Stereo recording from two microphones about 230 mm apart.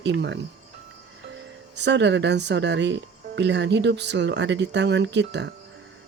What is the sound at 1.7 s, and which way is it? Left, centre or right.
Speech, right.